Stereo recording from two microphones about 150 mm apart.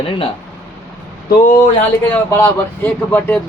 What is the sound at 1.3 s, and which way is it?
Speech, 65° left (ahead or behind).